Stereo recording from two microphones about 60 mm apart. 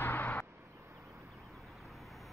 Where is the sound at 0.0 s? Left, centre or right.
Left.